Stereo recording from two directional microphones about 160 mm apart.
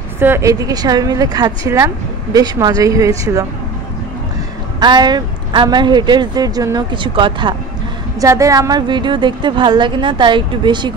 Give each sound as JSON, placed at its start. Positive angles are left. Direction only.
{"t": 0.2, "sound": "speech", "side_deg": -15}
{"t": 4.7, "sound": "speech", "side_deg": -25}
{"t": 8.2, "sound": "speech", "side_deg": -20}